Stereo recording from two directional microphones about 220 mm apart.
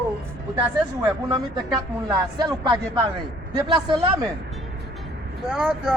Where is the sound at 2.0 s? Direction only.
15° right (ahead or behind).